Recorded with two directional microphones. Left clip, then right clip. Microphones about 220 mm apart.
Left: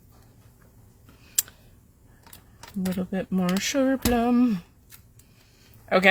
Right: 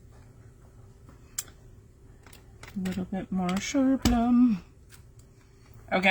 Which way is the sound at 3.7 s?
40° left (ahead or behind).